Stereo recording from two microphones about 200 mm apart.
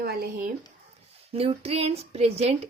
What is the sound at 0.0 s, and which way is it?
Speech, 50° right (ahead or behind).